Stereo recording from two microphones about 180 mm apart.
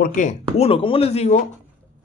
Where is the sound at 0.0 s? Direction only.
45° left (ahead or behind).